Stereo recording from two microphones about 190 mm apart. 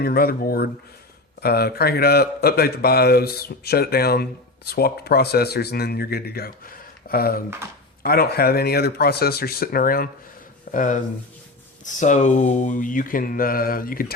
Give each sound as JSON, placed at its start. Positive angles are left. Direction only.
{"t": 0.0, "sound": "a man's voice", "side_deg": 55}